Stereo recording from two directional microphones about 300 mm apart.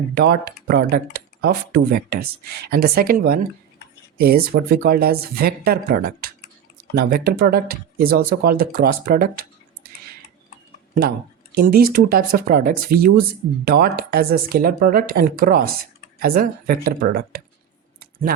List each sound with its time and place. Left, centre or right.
0.2 s speech: right
11.5 s speech: right